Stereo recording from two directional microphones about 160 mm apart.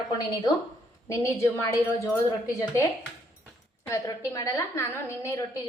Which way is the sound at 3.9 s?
20° left (ahead or behind).